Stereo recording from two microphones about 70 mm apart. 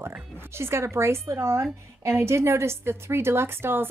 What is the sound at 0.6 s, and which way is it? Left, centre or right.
A woman's voice, right.